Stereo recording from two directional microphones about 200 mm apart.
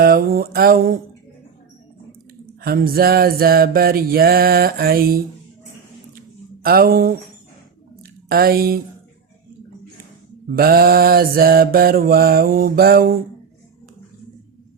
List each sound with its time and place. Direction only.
0.0 s mantra: 45° right (ahead or behind)
2.6 s mantra: 50° right (ahead or behind)
6.6 s mantra: 50° right (ahead or behind)
8.3 s mantra: 50° right (ahead or behind)
10.5 s mantra: 50° right (ahead or behind)